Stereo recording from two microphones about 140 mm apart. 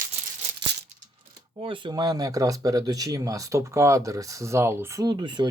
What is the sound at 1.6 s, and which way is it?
Speech, 35° right (ahead or behind).